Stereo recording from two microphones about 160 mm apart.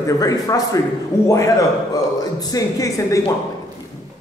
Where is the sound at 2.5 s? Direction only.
20° left (ahead or behind).